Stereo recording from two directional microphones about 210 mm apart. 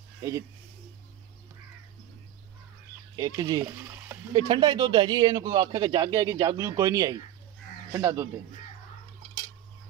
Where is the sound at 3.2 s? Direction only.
20° right (ahead or behind).